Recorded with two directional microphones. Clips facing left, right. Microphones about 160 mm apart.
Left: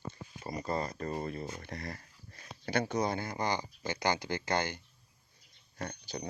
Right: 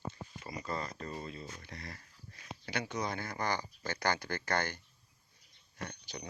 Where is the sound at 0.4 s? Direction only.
35° left (ahead or behind); by 4.8 s 20° left (ahead or behind).